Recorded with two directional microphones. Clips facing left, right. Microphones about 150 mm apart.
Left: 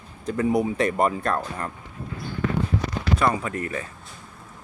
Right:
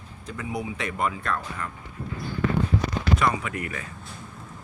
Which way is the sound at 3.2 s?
35° left (ahead or behind).